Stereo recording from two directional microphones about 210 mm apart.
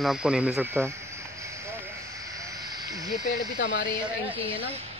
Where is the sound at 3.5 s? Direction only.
60° left (ahead or behind).